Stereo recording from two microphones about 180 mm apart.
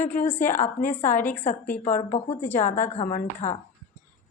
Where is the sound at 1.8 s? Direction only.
50° left (ahead or behind).